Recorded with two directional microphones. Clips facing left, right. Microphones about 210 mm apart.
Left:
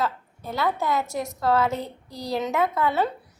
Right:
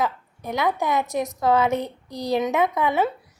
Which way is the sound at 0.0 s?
15° right (ahead or behind).